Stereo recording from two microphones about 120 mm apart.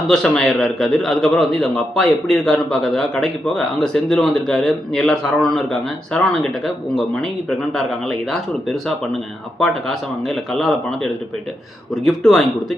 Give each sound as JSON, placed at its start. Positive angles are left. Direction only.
{"t": 0.1, "sound": "a man's voice", "side_deg": 5}
{"t": 7.8, "sound": "a man's voice", "side_deg": 0}
{"t": 10.2, "sound": "a man's voice", "side_deg": 5}